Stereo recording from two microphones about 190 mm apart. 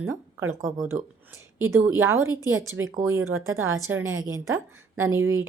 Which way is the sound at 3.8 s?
10° right (ahead or behind).